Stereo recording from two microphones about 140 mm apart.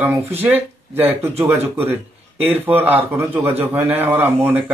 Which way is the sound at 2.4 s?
15° right (ahead or behind).